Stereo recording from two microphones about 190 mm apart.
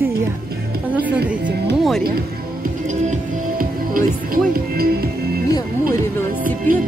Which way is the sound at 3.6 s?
50° right (ahead or behind).